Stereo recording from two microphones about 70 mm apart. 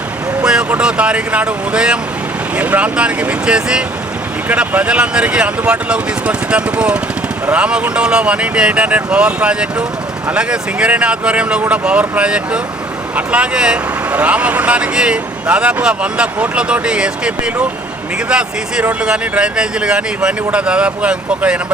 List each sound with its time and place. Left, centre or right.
0.7 s speech: centre